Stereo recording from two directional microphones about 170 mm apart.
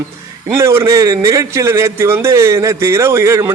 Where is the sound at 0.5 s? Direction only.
15° right (ahead or behind).